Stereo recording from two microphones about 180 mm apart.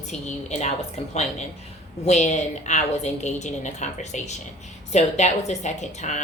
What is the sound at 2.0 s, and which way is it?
Speech, 40° left (ahead or behind).